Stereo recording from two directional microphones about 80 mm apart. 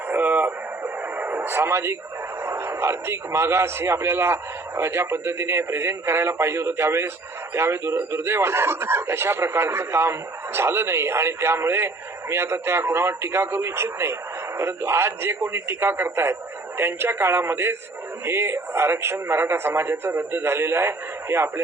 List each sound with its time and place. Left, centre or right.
0.1 s radio: right
2.4 s a man's voice: right